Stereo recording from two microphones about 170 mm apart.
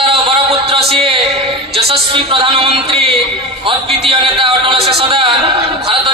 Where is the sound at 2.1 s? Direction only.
30° right (ahead or behind).